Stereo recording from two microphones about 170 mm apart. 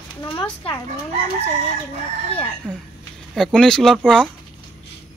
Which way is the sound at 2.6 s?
5° left (ahead or behind).